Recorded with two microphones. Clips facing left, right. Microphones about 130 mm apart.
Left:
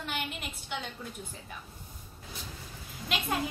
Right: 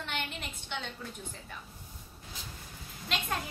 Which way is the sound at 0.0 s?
5° left (ahead or behind).